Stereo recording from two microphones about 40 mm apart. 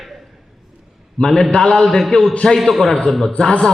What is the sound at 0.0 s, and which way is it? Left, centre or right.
Ping, centre.